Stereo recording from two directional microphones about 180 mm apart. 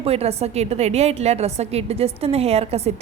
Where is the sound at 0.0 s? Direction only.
35° right (ahead or behind).